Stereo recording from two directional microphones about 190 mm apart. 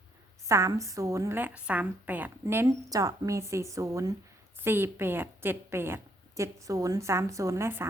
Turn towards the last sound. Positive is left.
turn(degrees=-15)  # may be behind; listen again after turning